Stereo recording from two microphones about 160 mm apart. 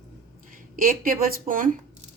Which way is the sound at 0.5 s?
60° right (ahead or behind).